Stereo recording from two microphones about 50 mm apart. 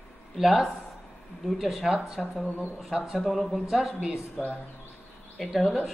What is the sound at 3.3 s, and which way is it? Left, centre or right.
Speech, centre.